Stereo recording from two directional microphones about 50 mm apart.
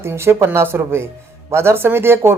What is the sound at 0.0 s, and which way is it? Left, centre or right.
Speech, right.